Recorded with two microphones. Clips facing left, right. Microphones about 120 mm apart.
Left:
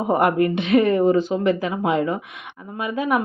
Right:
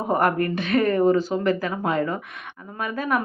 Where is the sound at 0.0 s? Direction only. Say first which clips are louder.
Left 3 dB; 15° left (ahead or behind).